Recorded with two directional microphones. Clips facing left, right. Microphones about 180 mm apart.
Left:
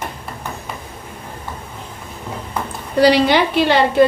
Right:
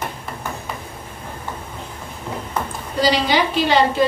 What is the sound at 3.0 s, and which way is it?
A woman's voice, 60° left (ahead or behind).